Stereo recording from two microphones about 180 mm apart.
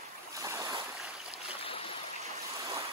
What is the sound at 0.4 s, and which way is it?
Boat, 20° right (ahead or behind).